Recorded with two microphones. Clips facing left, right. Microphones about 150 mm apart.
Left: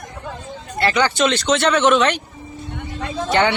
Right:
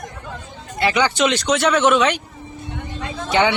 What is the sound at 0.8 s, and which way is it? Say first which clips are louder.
Speech: even; 15° right (ahead or behind).